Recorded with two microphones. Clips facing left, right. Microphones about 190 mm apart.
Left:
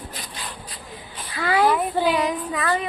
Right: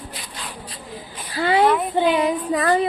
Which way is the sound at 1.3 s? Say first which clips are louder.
Right 3 dB; 30° right (ahead or behind).